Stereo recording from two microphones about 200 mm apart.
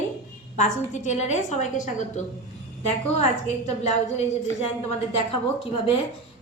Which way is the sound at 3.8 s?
30° left (ahead or behind).